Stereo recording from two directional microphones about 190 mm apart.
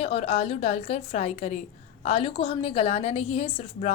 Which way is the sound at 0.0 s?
30° left (ahead or behind).